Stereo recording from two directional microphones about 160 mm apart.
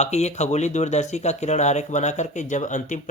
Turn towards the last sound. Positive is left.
turn(degrees=50)  # may be behind; listen again after turning